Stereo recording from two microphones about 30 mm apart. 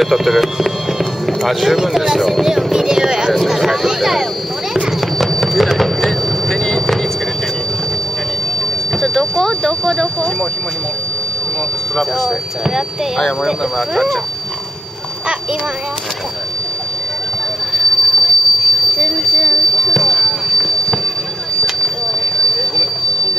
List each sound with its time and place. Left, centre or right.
0.0 s speech: centre
1.8 s speech: centre
2.4 s a sound: centre
3.3 s speech: centre
5.3 s a sound: centre
9.0 s speech: centre
17.7 s train wheels squealing: centre